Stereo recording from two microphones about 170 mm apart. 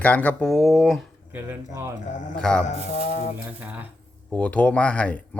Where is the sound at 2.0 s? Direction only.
45° left (ahead or behind).